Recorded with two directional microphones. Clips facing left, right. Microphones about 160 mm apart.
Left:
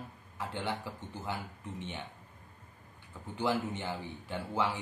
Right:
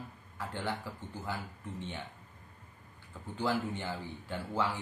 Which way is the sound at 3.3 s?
20° left (ahead or behind).